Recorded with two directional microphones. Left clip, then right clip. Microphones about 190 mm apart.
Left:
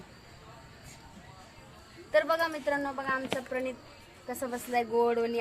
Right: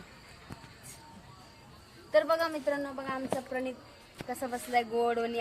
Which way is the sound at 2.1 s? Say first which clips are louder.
Even; 20° left (ahead or behind).